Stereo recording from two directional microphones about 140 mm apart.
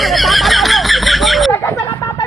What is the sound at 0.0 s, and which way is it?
Chicken, centre (ahead or behind).